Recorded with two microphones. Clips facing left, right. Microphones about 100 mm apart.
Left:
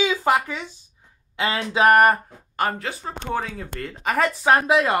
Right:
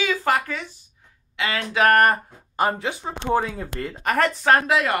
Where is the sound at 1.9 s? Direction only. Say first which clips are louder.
Left 2 dB; 5° left (ahead or behind).